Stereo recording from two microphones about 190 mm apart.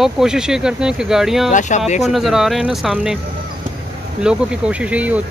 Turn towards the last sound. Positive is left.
turn(degrees=-5)  # may be behind; listen again after turning